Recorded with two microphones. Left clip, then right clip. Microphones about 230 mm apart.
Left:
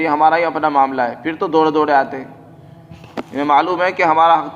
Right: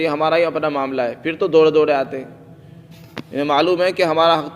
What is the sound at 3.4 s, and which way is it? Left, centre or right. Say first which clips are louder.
A man's voice: left 2 dB; right.